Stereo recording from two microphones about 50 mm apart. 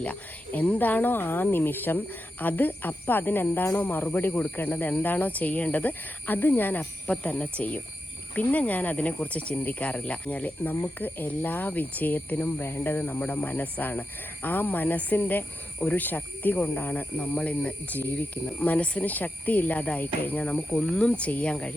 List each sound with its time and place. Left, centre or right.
0.0 s speech: left
20.8 s speech: left